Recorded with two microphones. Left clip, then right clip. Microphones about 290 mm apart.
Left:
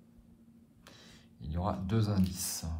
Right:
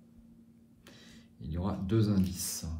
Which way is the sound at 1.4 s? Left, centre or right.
Centre.